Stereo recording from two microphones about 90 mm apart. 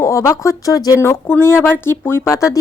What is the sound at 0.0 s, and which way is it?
Speech, 35° left (ahead or behind).